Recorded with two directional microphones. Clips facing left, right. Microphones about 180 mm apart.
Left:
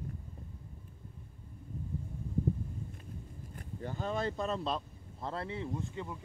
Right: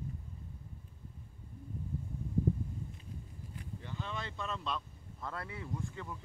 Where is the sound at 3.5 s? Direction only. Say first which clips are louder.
Left 5 dB; 45° left (ahead or behind); by 6.2 s 20° left (ahead or behind).